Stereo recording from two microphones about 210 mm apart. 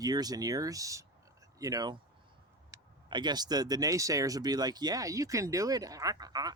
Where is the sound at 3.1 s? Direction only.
20° right (ahead or behind).